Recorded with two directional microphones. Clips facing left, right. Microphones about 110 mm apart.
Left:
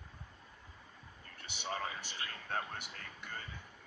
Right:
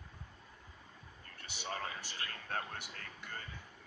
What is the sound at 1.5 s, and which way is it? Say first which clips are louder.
Speech: left 2 dB; 15° left (ahead or behind).